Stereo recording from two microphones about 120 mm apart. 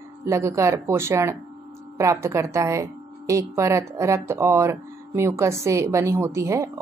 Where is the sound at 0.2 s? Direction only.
25° right (ahead or behind).